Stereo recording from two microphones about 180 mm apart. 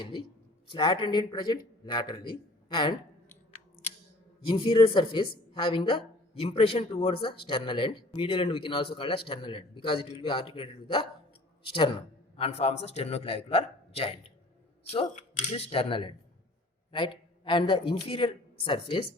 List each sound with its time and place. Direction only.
0.0 s speech: 25° left (ahead or behind)
4.4 s speech: 30° left (ahead or behind)
12.4 s a man's voice: 35° left (ahead or behind)